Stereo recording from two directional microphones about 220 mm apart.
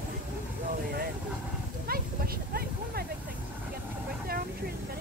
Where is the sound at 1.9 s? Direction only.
45° right (ahead or behind).